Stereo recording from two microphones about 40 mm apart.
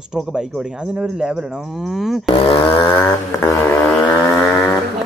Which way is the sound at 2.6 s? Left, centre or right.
Left.